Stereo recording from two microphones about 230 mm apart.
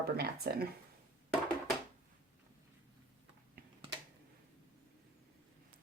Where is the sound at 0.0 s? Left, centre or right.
Right.